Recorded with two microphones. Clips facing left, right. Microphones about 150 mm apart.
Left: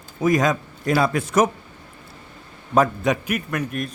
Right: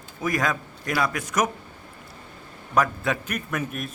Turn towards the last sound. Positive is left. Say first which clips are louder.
# left 3 dB
turn(degrees=0)  # may be behind; listen again after turning